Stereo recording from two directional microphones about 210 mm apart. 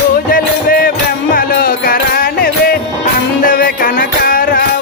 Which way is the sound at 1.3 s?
45° left (ahead or behind).